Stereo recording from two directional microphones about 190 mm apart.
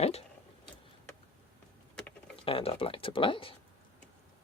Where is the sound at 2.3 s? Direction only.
30° left (ahead or behind).